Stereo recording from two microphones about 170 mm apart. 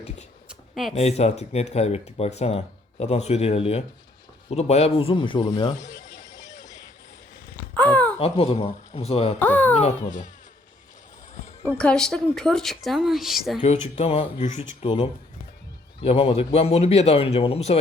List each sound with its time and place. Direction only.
0.4 s a sound: centre (ahead or behind)
0.9 s speech: 40° left (ahead or behind)
6.2 s a sound: 20° left (ahead or behind)
7.5 s a sound: 10° left (ahead or behind)
8.2 s speech: 35° left (ahead or behind)
9.4 s speech: 10° left (ahead or behind)
9.7 s speech: 45° left (ahead or behind)
11.7 s a woman's voice: 5° left (ahead or behind)
13.6 s speech: 40° left (ahead or behind)